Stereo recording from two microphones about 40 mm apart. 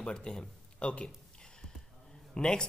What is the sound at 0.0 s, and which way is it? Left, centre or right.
Speech, left.